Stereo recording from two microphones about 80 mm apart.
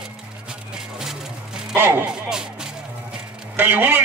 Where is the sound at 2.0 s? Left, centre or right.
Centre.